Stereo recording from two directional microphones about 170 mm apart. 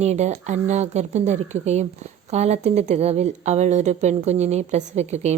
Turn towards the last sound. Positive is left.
turn(degrees=-40)  # may be behind; listen again after turning